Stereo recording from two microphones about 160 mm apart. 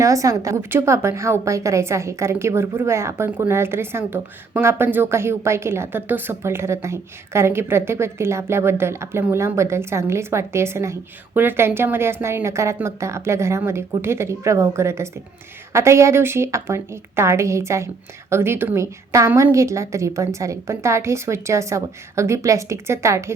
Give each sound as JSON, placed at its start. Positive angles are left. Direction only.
{"t": 0.0, "sound": "a woman's voice", "side_deg": -20}